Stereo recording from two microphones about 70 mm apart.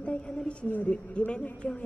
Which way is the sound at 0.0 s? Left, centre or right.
Centre.